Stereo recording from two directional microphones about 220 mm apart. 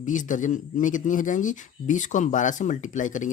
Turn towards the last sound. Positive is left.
turn(degrees=35)  # may be behind; listen again after turning